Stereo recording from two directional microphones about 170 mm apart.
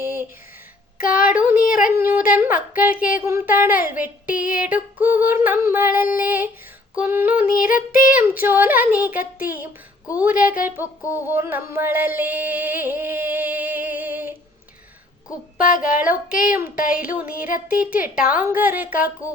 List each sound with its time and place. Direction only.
0.0 s a sound: 10° right (ahead or behind)
1.1 s music: 5° right (ahead or behind)
1.5 s a sound: 55° left (ahead or behind)
2.0 s music: 10° right (ahead or behind)
7.5 s child singing: 55° left (ahead or behind)
8.1 s music: 10° right (ahead or behind)
15.5 s a sound: 55° left (ahead or behind)
16.5 s music: 10° right (ahead or behind)
16.7 s child singing: 55° left (ahead or behind)
17.0 s music: 10° right (ahead or behind)
18.0 s child singing: 55° left (ahead or behind)
18.3 s music: 10° right (ahead or behind)